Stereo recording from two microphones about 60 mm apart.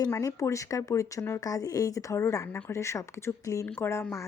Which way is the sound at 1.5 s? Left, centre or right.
Left.